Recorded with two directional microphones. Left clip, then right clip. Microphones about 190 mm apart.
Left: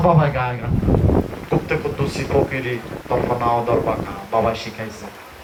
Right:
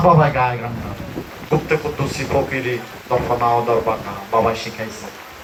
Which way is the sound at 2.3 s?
35° left (ahead or behind).